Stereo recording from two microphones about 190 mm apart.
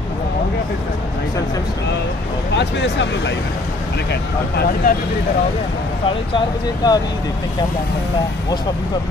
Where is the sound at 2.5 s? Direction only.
65° left (ahead or behind).